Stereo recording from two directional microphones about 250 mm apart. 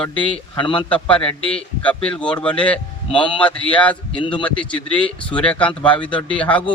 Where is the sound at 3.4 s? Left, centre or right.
Centre.